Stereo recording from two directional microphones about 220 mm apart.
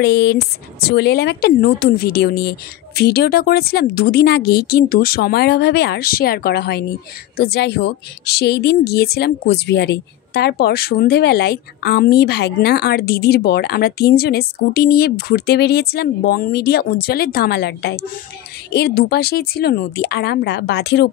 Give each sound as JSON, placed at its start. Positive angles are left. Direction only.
{"t": 0.0, "sound": "speech", "side_deg": 50}